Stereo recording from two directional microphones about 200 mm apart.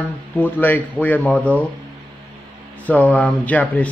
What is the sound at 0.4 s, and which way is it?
Speech, 10° left (ahead or behind).